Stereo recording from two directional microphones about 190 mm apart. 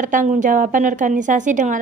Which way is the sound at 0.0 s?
45° right (ahead or behind).